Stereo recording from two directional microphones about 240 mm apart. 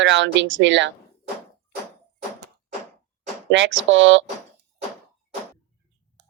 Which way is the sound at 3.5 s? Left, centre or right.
Right.